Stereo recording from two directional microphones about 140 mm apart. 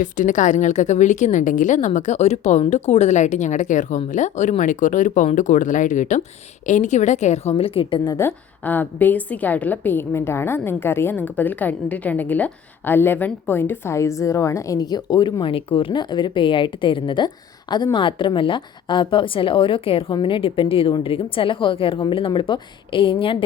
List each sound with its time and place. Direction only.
0.0 s a woman's voice: 65° left (ahead or behind); by 8.2 s 35° left (ahead or behind)
8.2 s a woman's voice: 15° left (ahead or behind); by 23.4 s 40° left (ahead or behind)